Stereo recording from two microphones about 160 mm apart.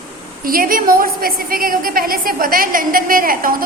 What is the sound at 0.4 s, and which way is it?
A woman's voice, 65° right (ahead or behind).